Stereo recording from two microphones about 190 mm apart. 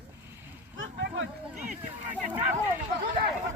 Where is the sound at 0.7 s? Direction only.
75° right (ahead or behind).